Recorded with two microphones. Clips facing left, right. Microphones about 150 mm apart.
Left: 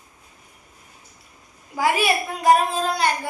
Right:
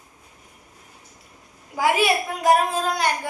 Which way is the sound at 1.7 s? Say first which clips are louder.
Right 1 dB; 15° right (ahead or behind).